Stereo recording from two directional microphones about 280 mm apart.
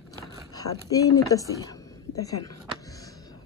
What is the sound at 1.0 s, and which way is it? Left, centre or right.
Speech, centre.